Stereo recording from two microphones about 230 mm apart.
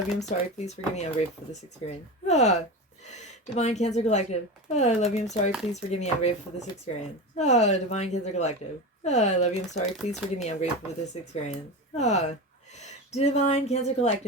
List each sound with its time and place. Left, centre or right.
0.2 s speech: left